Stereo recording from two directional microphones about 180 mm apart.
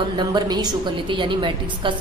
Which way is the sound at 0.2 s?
25° right (ahead or behind).